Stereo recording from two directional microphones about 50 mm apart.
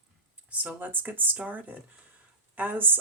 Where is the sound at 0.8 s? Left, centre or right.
Right.